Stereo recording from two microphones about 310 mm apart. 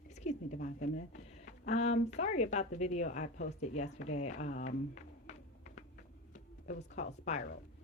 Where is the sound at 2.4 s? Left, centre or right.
Left.